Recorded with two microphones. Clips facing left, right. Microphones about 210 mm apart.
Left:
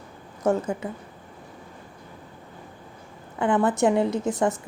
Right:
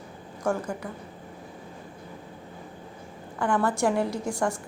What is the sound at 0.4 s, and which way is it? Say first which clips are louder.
Speech: left 5 dB; 20° left (ahead or behind).